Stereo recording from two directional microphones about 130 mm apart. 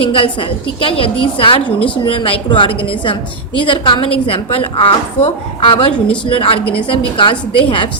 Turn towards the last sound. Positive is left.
turn(degrees=40)  # may be behind; listen again after turning